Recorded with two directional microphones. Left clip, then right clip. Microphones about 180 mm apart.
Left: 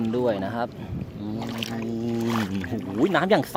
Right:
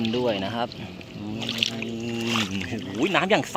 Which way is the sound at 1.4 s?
35° left (ahead or behind).